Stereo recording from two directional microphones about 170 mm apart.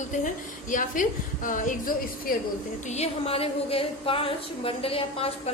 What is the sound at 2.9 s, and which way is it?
A woman's voice, 35° left (ahead or behind).